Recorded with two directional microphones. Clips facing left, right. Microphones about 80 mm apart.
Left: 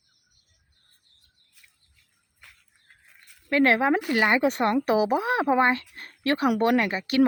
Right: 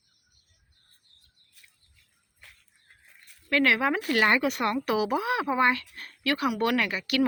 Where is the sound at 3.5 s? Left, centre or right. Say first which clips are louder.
Left 3 dB; left.